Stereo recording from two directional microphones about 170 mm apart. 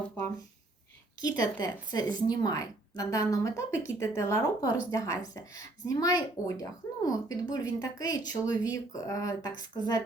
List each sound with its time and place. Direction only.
1.2 s a woman's voice: 20° left (ahead or behind)